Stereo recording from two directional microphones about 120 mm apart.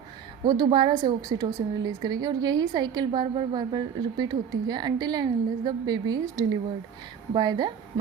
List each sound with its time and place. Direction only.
0.4 s a woman's voice: 35° right (ahead or behind)